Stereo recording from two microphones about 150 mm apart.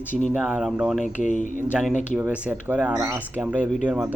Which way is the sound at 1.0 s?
55° left (ahead or behind).